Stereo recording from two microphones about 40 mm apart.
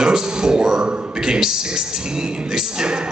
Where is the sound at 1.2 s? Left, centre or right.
Centre.